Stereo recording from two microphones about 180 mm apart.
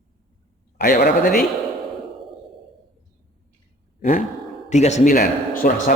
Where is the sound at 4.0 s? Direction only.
45° left (ahead or behind).